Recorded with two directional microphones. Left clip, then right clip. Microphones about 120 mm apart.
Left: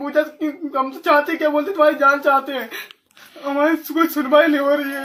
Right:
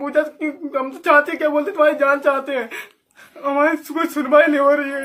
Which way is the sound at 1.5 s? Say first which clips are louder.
Even; 40° right (ahead or behind).